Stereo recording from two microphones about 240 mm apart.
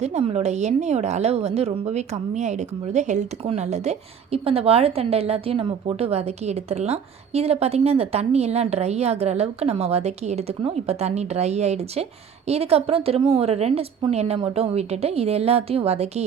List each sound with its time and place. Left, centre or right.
0.0 s a woman's voice: right